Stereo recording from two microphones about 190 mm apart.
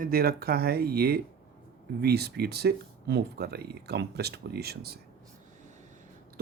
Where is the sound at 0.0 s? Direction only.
50° right (ahead or behind).